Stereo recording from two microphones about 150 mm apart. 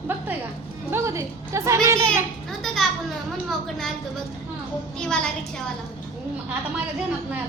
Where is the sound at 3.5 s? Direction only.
Centre (ahead or behind).